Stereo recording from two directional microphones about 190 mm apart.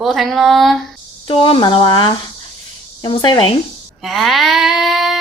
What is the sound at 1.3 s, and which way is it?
Speech, 30° left (ahead or behind).